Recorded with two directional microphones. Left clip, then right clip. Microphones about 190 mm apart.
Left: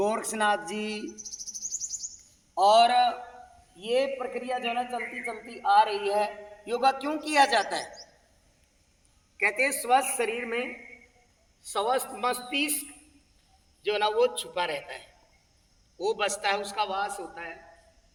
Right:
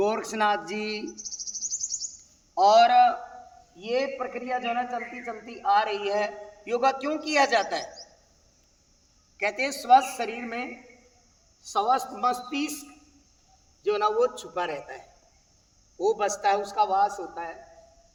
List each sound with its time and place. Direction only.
0.0 s speech: 35° left (ahead or behind)
2.6 s a man's voice: 20° left (ahead or behind); by 7.9 s 30° right (ahead or behind)
9.4 s a woman's voice: 50° right (ahead or behind)
11.7 s a man's voice: 65° right (ahead or behind)
13.8 s a man's voice: 60° right (ahead or behind); by 17.5 s 30° right (ahead or behind)